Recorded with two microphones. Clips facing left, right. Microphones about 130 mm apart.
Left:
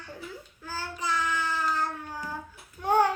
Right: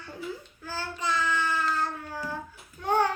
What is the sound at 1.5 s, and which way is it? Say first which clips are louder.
Cat: right 1 dB; 15° left (ahead or behind).